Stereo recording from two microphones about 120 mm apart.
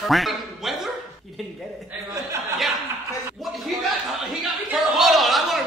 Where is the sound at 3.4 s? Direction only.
Centre (ahead or behind).